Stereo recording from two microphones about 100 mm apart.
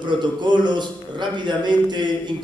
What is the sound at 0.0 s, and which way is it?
A man's voice, 50° right (ahead or behind).